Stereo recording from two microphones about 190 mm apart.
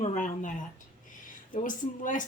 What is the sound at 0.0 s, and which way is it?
A woman's voice, 40° left (ahead or behind).